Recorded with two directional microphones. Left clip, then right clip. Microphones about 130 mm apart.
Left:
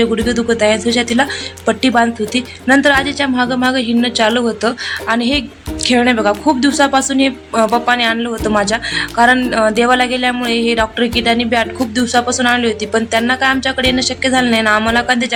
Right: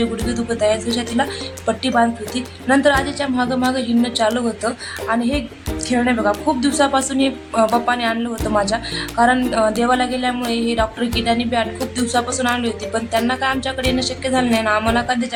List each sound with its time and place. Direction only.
0.0 s speech: 30° left (ahead or behind)